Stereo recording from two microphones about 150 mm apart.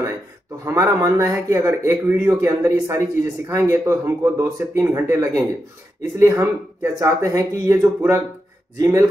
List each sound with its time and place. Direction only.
0.7 s speech: 20° right (ahead or behind)